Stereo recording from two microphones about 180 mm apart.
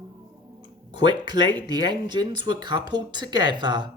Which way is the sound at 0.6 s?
25° right (ahead or behind).